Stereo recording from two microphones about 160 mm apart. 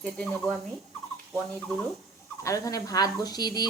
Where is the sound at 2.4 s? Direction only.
20° left (ahead or behind).